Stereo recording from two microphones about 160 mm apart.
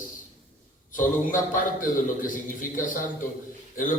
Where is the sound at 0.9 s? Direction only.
55° left (ahead or behind).